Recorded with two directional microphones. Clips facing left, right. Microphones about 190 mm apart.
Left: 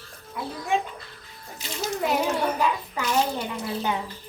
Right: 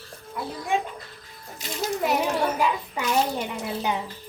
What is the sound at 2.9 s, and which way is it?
Speech, 15° right (ahead or behind).